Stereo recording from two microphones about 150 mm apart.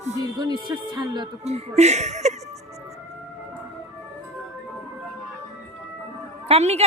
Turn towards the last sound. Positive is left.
turn(degrees=-45)  # may be behind; listen again after turning